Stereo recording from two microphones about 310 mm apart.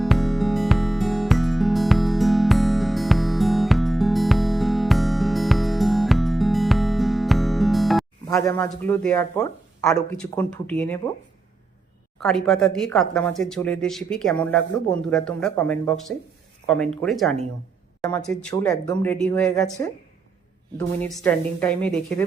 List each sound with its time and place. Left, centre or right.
0.0 s music: centre
8.3 s speech: centre
12.2 s a woman's voice: centre